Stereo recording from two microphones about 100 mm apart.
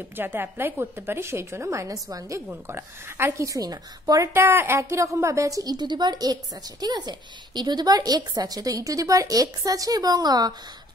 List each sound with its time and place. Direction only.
0.1 s a woman's voice: 20° right (ahead or behind); by 4.3 s 40° right (ahead or behind)
4.3 s a woman's voice: 25° right (ahead or behind); by 10.5 s 40° right (ahead or behind)